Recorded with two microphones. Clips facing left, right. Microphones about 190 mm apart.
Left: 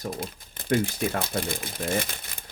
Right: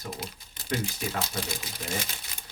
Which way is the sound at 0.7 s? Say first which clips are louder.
Left 7 dB; 55° left (ahead or behind).